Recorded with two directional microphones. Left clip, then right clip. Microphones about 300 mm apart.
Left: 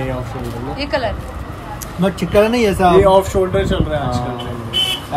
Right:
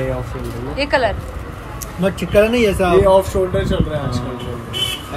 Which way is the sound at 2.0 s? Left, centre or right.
Left.